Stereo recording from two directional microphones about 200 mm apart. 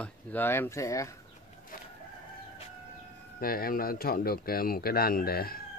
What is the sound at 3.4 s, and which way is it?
Speech, 45° left (ahead or behind).